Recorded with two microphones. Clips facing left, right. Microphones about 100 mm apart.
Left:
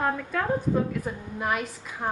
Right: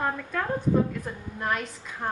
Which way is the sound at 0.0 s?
Centre (ahead or behind).